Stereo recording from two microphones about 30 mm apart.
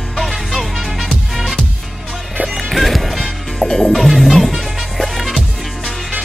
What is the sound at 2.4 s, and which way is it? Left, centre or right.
Music, right.